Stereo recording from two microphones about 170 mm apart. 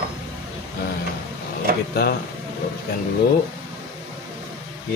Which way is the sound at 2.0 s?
65° left (ahead or behind).